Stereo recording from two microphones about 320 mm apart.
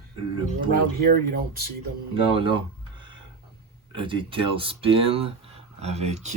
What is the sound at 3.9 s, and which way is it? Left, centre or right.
Speech, centre.